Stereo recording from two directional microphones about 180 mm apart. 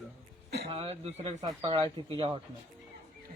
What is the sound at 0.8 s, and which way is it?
Speech, 35° right (ahead or behind).